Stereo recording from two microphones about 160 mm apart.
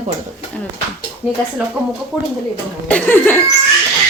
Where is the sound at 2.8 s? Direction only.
10° left (ahead or behind).